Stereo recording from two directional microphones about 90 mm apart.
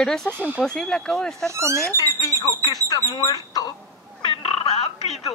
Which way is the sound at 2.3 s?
35° left (ahead or behind).